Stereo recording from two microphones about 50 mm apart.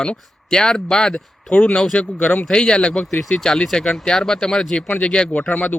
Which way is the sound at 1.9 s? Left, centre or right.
Left.